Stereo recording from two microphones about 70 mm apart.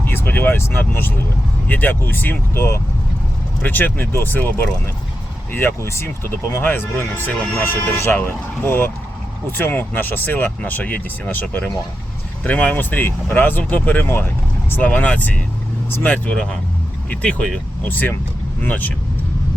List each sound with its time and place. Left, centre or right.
0.0 s vehicle: left
0.8 s speech: left